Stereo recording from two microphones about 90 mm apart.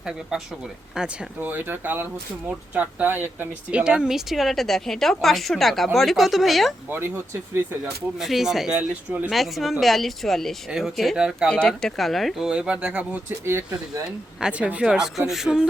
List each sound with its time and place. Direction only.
1.4 s speech: 20° right (ahead or behind); by 6.7 s centre (ahead or behind)
8.2 s speech: 5° right (ahead or behind)
11.4 s speech: 10° left (ahead or behind); by 13.1 s 15° right (ahead or behind)
13.4 s speech: 30° right (ahead or behind)
14.0 s speech: 10° right (ahead or behind)